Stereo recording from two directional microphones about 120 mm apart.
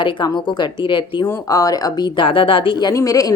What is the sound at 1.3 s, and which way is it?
Speech, 30° left (ahead or behind).